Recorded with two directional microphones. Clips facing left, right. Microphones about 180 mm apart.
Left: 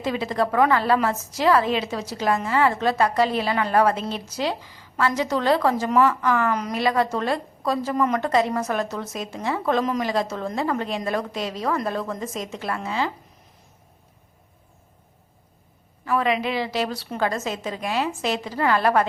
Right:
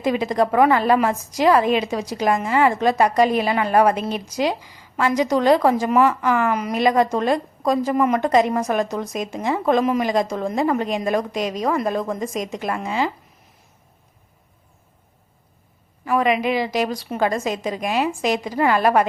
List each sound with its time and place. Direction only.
0.0 s a woman's voice: 15° right (ahead or behind)
16.0 s a woman's voice: 15° right (ahead or behind)